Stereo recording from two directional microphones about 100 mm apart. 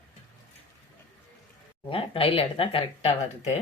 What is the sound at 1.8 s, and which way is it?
Speech, 70° left (ahead or behind).